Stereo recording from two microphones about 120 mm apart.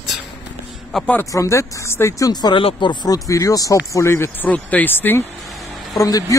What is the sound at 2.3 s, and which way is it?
Speech, 35° left (ahead or behind).